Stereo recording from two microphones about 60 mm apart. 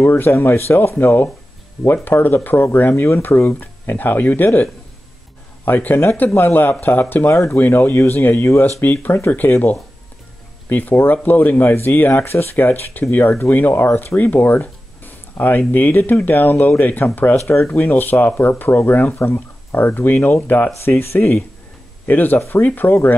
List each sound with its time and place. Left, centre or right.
0.0 s speech: left
3.9 s speech: left
5.7 s speech: left
7.2 s speech: left
7.5 s speech: left
9.4 s speech: left
10.7 s speech: left
20.8 s speech: left
22.0 s speech: left